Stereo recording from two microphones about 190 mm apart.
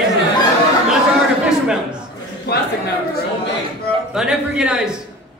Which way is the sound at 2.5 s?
55° left (ahead or behind).